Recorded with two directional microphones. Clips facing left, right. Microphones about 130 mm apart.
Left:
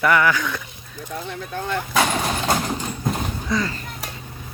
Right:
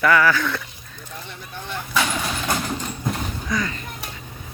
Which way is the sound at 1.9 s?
45° left (ahead or behind).